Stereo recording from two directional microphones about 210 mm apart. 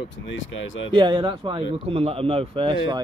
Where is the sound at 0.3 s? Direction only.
65° left (ahead or behind).